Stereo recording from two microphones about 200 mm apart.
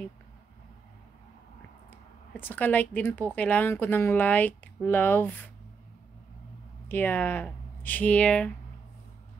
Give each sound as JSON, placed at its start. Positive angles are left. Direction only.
{"t": 2.4, "sound": "a woman's voice", "side_deg": 10}
{"t": 6.9, "sound": "speech", "side_deg": 10}